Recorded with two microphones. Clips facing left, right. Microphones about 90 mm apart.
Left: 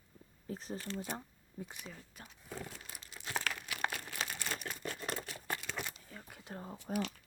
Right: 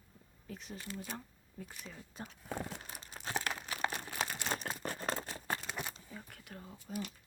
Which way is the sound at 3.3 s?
25° right (ahead or behind).